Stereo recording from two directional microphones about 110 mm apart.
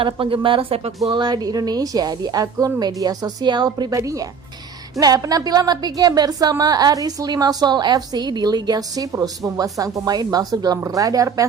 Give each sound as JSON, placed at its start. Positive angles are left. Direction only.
{"t": 0.0, "sound": "speech", "side_deg": -50}
{"t": 1.1, "sound": "a woman's voice", "side_deg": -40}